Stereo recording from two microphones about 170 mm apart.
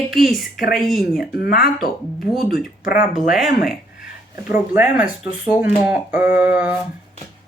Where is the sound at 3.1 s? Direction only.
Centre (ahead or behind).